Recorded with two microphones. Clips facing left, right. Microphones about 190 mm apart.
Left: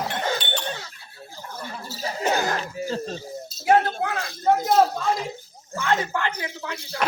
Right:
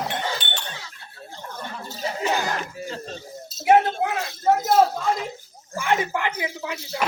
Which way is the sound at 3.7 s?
20° right (ahead or behind).